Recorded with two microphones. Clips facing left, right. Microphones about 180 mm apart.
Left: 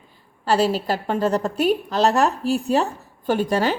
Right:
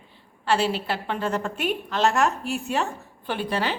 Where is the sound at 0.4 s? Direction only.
40° left (ahead or behind).